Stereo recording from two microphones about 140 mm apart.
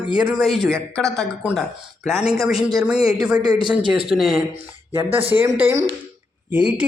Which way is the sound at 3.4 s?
30° right (ahead or behind).